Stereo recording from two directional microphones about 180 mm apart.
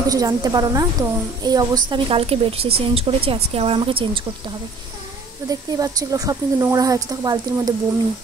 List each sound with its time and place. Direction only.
0.0 s a woman's voice: 20° right (ahead or behind)
5.5 s a woman's voice: 20° right (ahead or behind)